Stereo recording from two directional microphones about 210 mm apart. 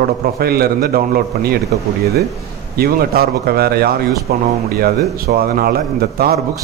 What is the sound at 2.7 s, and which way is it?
A man's voice, 45° right (ahead or behind).